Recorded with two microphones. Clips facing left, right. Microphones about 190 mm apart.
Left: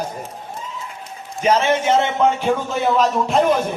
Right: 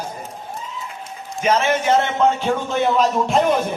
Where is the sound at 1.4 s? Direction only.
25° left (ahead or behind).